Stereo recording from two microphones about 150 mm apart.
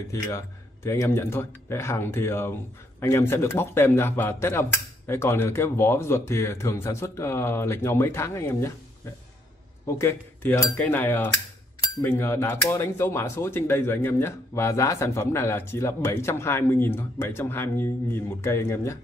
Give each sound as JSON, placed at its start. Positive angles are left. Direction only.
{"t": 0.8, "sound": "speech", "side_deg": 15}
{"t": 9.8, "sound": "speech", "side_deg": 15}